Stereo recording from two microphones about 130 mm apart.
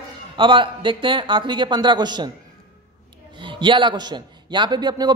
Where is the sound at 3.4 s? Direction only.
40° right (ahead or behind).